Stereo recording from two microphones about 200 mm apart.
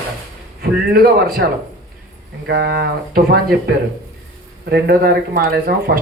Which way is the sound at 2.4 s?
55° right (ahead or behind).